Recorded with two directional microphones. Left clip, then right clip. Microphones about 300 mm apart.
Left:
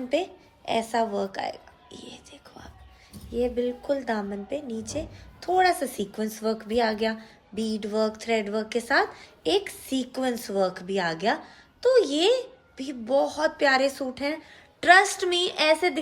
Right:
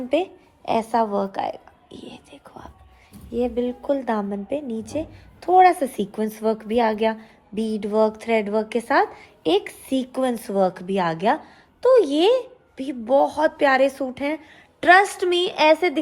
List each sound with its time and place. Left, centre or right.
0.1 s a woman's voice: centre